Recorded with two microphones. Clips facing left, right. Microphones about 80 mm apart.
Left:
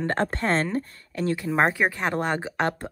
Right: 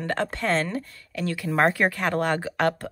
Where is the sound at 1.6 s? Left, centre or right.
Centre.